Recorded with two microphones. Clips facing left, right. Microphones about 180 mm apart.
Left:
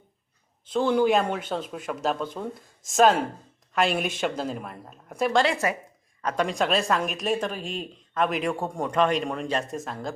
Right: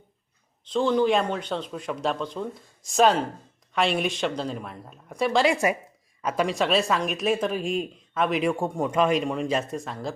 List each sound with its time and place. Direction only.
0.6 s speech: 5° left (ahead or behind)
5.5 s speech: 15° right (ahead or behind); by 10.1 s centre (ahead or behind)